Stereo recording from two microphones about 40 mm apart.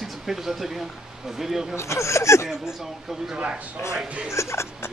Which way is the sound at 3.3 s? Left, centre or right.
Right.